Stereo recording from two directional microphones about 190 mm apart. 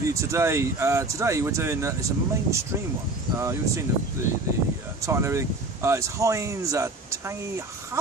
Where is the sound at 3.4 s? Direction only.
15° right (ahead or behind).